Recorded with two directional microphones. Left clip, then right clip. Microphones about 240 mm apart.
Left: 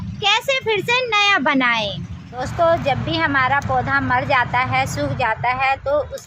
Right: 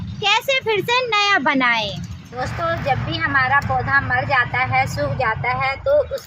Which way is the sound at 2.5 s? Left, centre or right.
Left.